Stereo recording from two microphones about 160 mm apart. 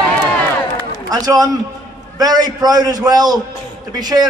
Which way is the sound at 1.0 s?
20° right (ahead or behind).